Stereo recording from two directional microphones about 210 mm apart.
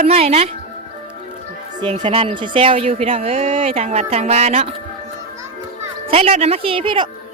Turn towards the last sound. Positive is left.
turn(degrees=-25)  # may be behind; listen again after turning